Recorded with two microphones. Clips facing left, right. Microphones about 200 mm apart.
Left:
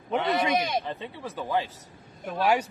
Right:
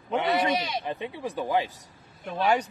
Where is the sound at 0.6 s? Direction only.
50° left (ahead or behind).